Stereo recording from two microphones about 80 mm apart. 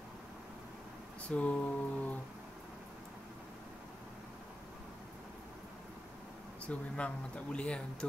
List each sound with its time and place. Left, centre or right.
1.3 s speech: centre
6.6 s speech: centre